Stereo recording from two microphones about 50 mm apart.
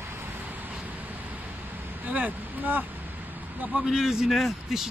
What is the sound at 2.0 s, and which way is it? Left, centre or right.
Speech, right.